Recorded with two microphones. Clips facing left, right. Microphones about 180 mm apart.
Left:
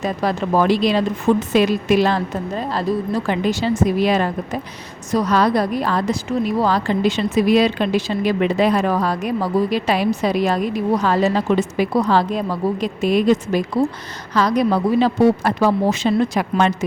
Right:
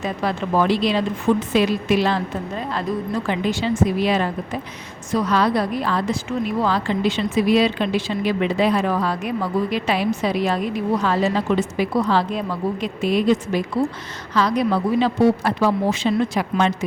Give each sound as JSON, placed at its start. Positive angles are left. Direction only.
{"t": 0.0, "sound": "a woman's voice", "side_deg": 40}